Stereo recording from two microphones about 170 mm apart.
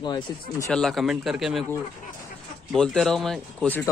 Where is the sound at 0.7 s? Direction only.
5° left (ahead or behind).